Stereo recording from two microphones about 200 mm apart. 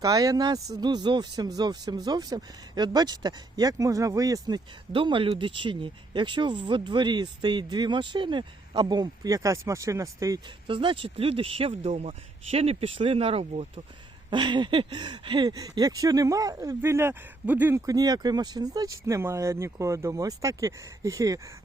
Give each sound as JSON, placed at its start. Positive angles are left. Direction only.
{"t": 0.0, "sound": "speech", "side_deg": -15}